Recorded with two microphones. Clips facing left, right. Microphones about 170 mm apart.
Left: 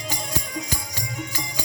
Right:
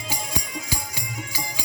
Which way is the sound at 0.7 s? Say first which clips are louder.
Even; 10° right (ahead or behind).